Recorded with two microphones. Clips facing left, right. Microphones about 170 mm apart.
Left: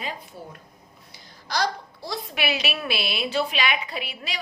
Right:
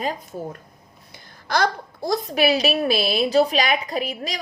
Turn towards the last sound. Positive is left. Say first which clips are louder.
# right 8 dB
turn(degrees=-40)  # may be behind; listen again after turning